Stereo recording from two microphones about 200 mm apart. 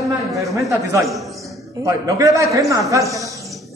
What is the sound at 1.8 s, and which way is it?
A man's voice, 15° right (ahead or behind).